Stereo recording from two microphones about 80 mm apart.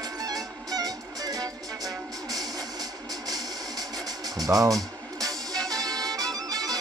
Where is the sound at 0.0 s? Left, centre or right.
Right.